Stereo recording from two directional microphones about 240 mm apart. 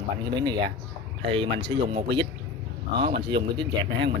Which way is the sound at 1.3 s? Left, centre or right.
Right.